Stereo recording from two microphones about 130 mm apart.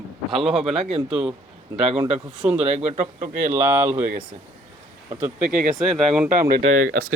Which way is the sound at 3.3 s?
15° right (ahead or behind).